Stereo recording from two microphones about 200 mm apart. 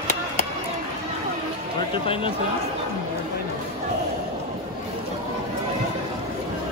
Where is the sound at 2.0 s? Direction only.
25° left (ahead or behind).